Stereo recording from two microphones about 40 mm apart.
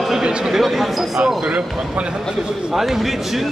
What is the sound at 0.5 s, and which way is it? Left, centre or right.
Speech, centre.